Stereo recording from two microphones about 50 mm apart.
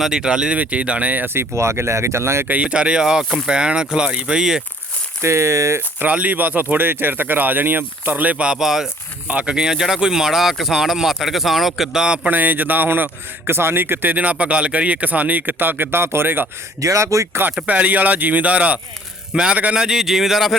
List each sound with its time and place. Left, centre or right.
0.0 s speech: centre; by 1.3 s right
1.5 s speech: right
2.5 s speech: right
5.2 s speech: right
6.0 s a man's voice: right
8.5 s speech: centre
9.2 s speech: right; by 11.9 s centre
11.9 s speech: centre
12.3 s a man's voice: right
16.8 s speech: right
17.7 s a man's voice: right
19.3 s a man's voice: centre